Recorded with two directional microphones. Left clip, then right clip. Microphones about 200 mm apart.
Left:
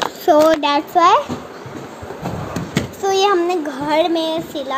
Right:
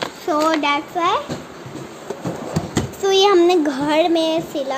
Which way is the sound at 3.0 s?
15° right (ahead or behind).